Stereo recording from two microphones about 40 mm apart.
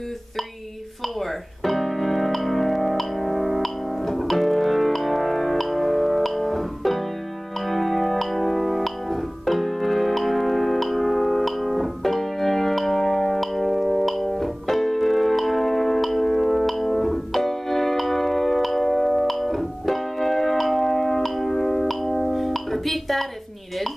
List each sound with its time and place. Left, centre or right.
1.0 s keyboard: centre
7.6 s music: centre